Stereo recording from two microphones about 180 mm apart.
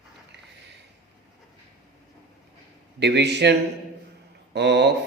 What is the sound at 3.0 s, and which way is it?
Speech, 75° right (ahead or behind).